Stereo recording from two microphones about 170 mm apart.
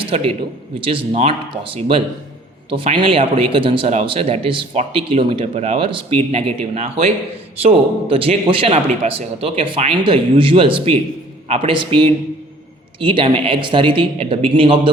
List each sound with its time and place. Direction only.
0.0 s speech: 35° right (ahead or behind)